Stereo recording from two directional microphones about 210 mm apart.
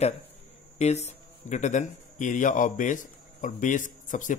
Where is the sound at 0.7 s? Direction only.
30° left (ahead or behind).